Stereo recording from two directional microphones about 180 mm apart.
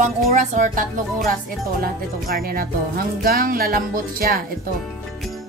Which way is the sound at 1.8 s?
55° right (ahead or behind).